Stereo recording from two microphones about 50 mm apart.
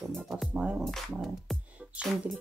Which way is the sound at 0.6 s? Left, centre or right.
Centre.